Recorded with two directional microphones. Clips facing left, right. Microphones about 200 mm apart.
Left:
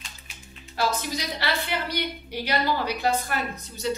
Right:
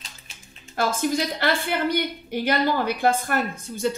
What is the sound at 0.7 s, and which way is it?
Speech, 50° right (ahead or behind).